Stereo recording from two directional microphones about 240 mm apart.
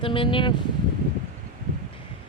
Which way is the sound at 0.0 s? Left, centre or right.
Left.